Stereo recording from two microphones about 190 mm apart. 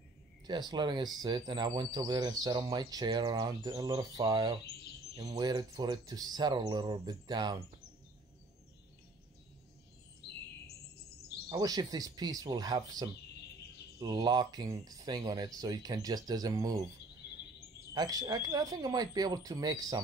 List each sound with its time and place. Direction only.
0.5 s speech: 20° right (ahead or behind)
10.2 s music: 65° left (ahead or behind)
11.4 s speech: 20° right (ahead or behind)
17.9 s speech: 20° right (ahead or behind)